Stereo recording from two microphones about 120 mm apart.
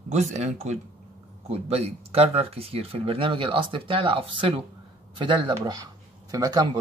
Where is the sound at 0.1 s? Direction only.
70° right (ahead or behind).